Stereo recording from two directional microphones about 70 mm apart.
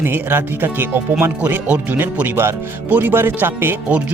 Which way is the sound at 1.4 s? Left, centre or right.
Right.